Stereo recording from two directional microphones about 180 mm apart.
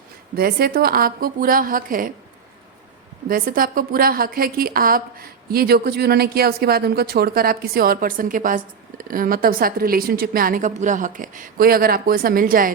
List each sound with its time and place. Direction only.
0.3 s a woman's voice: 55° right (ahead or behind)
3.2 s a woman's voice: 50° right (ahead or behind)